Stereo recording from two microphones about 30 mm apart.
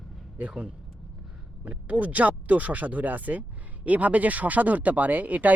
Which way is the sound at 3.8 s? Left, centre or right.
Right.